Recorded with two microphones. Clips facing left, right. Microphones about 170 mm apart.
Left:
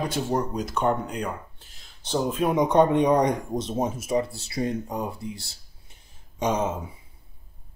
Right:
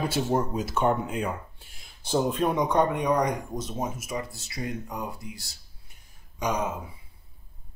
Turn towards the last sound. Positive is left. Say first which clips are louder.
# left 3 dB
turn(degrees=25)  # may be behind; listen again after turning